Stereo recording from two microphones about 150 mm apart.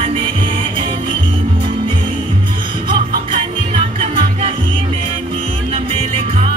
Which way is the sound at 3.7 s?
35° right (ahead or behind).